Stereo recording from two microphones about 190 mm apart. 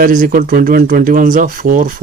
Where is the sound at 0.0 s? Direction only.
45° right (ahead or behind).